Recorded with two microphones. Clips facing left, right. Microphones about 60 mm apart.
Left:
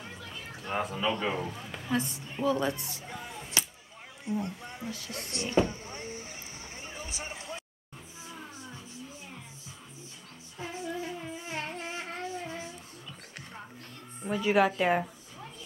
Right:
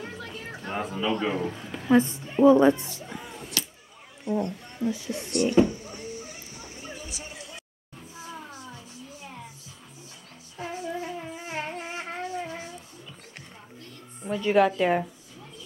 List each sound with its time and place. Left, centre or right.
0.7 s speech: centre
1.9 s a woman's voice: right
3.6 s a sound: left
4.4 s speech: centre
4.9 s speech: centre
5.3 s speech: left
5.7 s vehicle: left
6.8 s a sound: left
10.6 s music: right
10.9 s shofar: centre
11.8 s music: right
14.2 s a woman's voice: centre